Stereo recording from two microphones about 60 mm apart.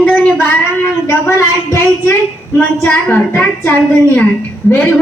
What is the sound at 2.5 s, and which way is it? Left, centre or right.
A woman's voice, left.